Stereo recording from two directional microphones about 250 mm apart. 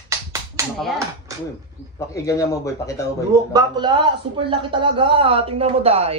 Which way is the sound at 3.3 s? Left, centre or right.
Centre.